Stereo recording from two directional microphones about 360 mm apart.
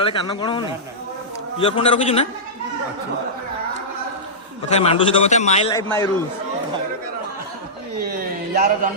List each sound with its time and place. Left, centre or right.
0.0 s a man's voice: centre
4.7 s a man's voice: centre
8.1 s speech: right